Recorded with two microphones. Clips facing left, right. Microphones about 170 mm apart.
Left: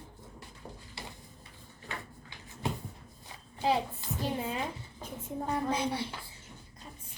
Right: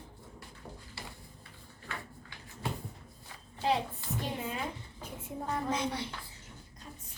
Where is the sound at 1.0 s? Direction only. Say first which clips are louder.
Left 2 dB; 15° left (ahead or behind).